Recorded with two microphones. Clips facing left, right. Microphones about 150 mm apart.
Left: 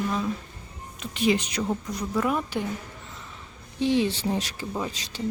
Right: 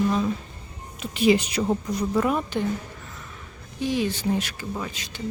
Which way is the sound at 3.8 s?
25° left (ahead or behind).